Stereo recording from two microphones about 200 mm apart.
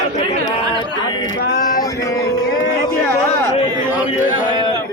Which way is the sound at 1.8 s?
15° left (ahead or behind).